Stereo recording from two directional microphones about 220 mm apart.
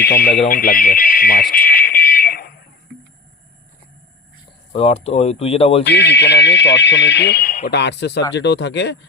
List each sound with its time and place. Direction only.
0.0 s speech: 45° left (ahead or behind)
0.4 s alarm: 40° left (ahead or behind)
4.7 s speech: 25° left (ahead or behind)
5.8 s speech: 50° left (ahead or behind)